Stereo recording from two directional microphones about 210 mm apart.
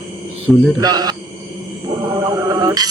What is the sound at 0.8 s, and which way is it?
Speech, 20° right (ahead or behind).